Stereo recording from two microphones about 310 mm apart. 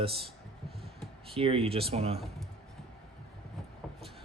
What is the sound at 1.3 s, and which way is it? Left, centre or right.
Speech, centre.